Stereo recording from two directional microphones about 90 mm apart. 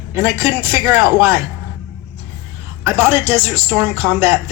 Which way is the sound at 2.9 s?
25° right (ahead or behind).